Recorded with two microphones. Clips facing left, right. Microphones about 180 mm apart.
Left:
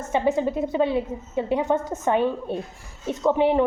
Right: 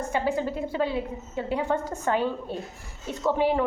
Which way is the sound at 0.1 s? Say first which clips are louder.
Left 7 dB; 20° left (ahead or behind).